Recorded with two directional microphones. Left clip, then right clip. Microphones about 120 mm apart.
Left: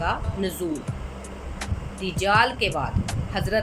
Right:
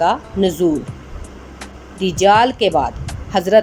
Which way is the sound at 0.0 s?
60° right (ahead or behind).